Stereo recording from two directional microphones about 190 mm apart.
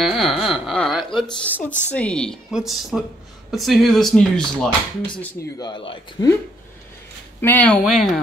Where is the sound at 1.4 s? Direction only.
10° left (ahead or behind); by 6.3 s 25° left (ahead or behind).